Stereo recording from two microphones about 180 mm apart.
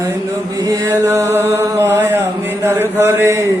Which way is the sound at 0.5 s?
20° right (ahead or behind).